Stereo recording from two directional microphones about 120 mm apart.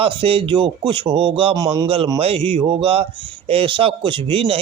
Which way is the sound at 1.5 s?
30° right (ahead or behind).